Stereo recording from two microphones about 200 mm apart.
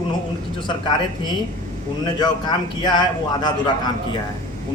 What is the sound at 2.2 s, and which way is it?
A man's voice, 20° left (ahead or behind).